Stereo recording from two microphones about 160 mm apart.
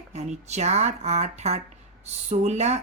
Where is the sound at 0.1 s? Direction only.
45° right (ahead or behind).